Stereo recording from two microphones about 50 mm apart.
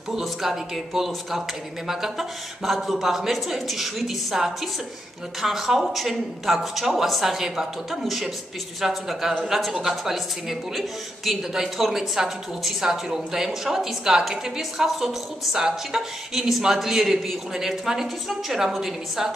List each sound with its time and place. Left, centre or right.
0.1 s a woman's voice: centre